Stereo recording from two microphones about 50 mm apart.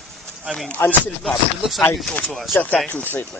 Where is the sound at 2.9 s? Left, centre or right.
Left.